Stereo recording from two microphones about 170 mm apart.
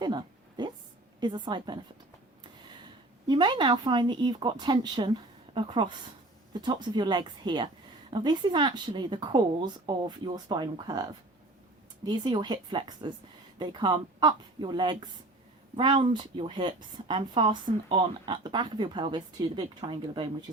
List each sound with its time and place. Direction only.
0.0 s a sound: 25° right (ahead or behind)
1.2 s a woman's voice: 25° right (ahead or behind)
3.2 s a woman's voice: 25° right (ahead or behind)
12.0 s a woman's voice: 25° right (ahead or behind)